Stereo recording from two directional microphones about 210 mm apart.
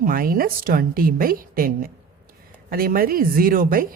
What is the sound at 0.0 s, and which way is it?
Speech, 45° right (ahead or behind).